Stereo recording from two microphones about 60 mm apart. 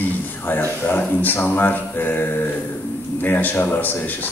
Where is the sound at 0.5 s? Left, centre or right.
Left.